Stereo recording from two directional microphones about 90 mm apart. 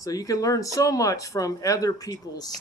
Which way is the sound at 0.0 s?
40° left (ahead or behind).